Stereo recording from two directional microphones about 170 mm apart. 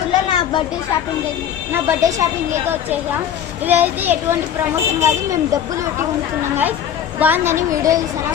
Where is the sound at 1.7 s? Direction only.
15° right (ahead or behind).